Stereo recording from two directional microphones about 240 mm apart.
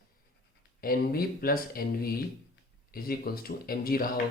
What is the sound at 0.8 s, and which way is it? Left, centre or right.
Speech, left.